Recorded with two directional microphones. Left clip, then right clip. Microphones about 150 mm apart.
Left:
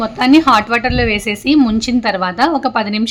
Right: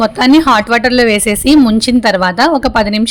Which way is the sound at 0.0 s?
40° right (ahead or behind).